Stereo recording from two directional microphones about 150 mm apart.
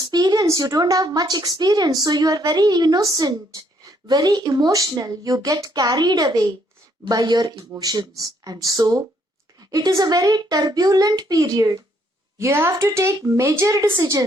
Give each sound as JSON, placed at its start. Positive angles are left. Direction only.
{"t": 0.0, "sound": "a woman's voice", "side_deg": -25}